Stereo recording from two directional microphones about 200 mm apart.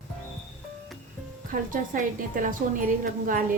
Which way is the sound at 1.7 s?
40° right (ahead or behind).